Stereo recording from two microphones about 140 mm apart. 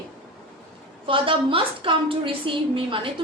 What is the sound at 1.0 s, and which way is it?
A woman's voice, 40° right (ahead or behind).